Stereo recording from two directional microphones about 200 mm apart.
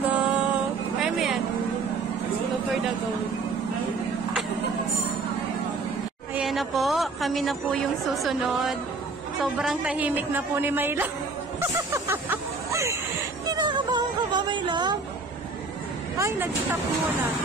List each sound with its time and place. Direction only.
0.0 s music: 5° right (ahead or behind)
6.3 s a woman's voice: centre (ahead or behind)
11.9 s a sound: 10° right (ahead or behind)
13.5 s music: 20° right (ahead or behind)
16.2 s a woman's voice: 15° right (ahead or behind)